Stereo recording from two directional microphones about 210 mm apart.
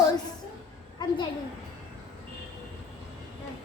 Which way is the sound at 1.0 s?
20° left (ahead or behind).